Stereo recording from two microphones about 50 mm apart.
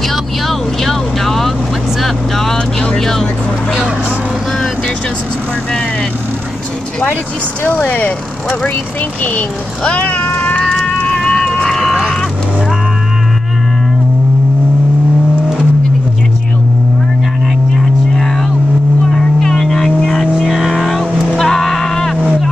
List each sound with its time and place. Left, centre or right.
0.1 s vehicle: centre
7.6 s speech: left
9.8 s cat: left
10.6 s a sound: centre
11.1 s run: centre
17.7 s vehicle: centre
21.4 s a sound: centre